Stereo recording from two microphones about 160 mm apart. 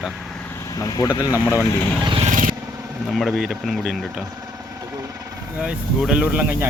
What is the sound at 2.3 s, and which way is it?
Vehicle, 55° right (ahead or behind).